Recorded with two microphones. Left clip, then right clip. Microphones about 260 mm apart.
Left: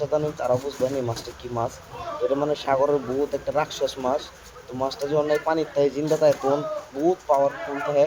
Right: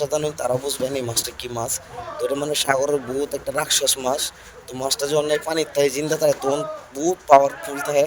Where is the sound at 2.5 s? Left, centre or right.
Right.